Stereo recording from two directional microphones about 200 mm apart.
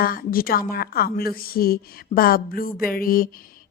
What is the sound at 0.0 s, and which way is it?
A woman's voice, 45° left (ahead or behind).